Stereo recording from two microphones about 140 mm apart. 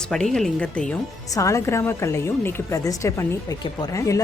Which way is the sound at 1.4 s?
20° left (ahead or behind).